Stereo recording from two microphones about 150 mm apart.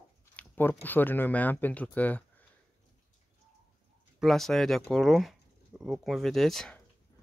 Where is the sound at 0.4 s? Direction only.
15° left (ahead or behind).